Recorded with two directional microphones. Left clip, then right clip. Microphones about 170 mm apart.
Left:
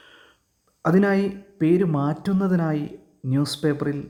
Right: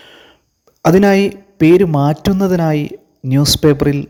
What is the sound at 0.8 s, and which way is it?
Speech, 30° right (ahead or behind).